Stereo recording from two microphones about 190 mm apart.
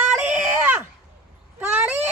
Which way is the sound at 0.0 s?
5° right (ahead or behind).